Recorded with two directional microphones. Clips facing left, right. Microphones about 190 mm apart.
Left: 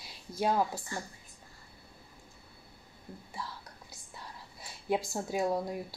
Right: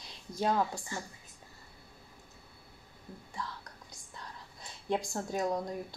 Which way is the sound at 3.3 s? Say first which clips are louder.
Right 1 dB; 5° left (ahead or behind).